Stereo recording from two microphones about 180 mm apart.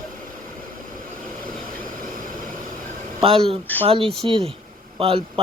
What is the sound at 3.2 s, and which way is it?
Speech, 30° right (ahead or behind).